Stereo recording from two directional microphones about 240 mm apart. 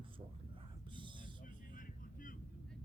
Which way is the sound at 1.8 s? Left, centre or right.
Left.